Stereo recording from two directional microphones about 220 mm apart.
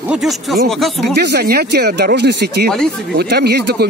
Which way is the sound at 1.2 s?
50° right (ahead or behind).